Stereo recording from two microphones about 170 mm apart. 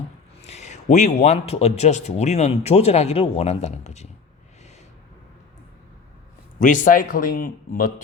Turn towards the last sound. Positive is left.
turn(degrees=55)  # may be behind; listen again after turning